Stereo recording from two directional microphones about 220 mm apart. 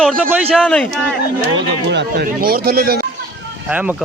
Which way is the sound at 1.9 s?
45° right (ahead or behind).